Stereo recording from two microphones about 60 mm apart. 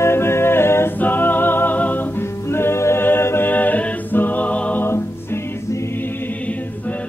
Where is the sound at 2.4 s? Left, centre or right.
Left.